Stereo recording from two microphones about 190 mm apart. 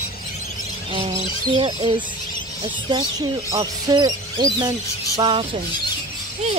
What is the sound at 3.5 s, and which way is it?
Speech, 20° right (ahead or behind).